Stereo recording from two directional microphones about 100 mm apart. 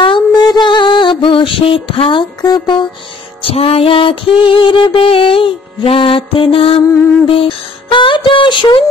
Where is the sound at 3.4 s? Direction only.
70° left (ahead or behind).